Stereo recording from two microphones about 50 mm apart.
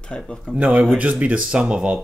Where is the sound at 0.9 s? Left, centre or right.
Right.